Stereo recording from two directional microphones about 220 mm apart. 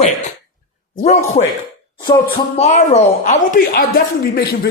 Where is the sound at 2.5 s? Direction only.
30° left (ahead or behind).